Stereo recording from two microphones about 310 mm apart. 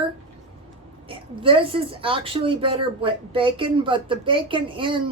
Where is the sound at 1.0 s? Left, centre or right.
Centre.